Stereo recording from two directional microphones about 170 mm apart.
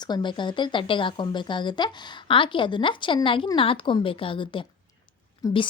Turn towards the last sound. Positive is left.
turn(degrees=20)  # may be behind; listen again after turning